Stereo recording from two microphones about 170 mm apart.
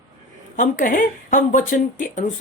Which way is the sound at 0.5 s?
50° left (ahead or behind).